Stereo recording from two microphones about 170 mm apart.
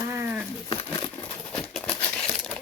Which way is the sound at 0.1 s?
10° right (ahead or behind).